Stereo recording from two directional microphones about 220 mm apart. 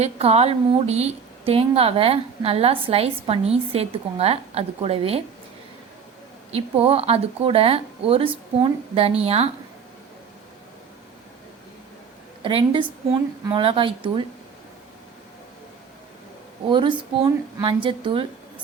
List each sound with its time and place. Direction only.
0.0 s a woman's voice: 30° right (ahead or behind)
6.5 s a woman's voice: 25° right (ahead or behind)
12.4 s a woman's voice: 25° right (ahead or behind)
16.6 s a woman's voice: 20° right (ahead or behind)